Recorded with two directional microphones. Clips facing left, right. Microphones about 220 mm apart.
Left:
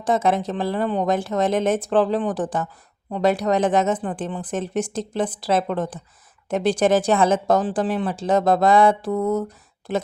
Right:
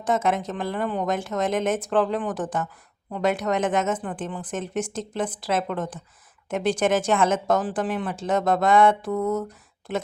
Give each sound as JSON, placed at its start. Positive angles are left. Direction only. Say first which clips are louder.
{"t": 0.0, "sound": "speech", "louder": "left 3 dB", "side_deg": 35}